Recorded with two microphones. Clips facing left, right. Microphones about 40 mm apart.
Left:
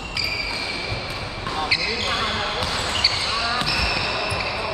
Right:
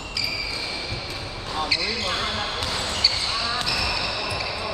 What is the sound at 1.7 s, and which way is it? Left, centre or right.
Basketball bounce, left.